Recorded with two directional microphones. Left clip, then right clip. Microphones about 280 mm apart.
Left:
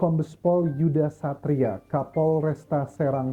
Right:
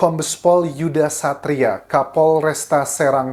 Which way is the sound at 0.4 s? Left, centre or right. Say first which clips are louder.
Right 8 dB; centre.